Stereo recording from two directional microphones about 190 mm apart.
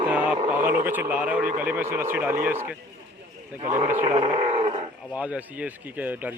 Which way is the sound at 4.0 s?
30° right (ahead or behind).